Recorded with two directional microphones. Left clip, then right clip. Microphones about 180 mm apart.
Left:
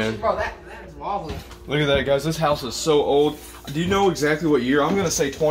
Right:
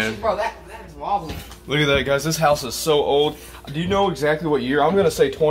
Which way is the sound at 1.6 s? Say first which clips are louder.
Right 1 dB; centre (ahead or behind).